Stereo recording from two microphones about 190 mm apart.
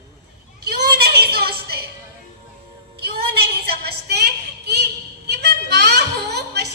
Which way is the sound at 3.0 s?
55° right (ahead or behind).